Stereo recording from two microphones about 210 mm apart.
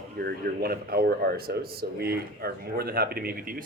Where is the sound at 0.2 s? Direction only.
45° right (ahead or behind).